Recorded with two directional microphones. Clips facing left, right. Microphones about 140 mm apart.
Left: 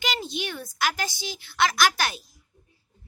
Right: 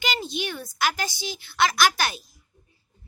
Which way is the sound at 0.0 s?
5° right (ahead or behind).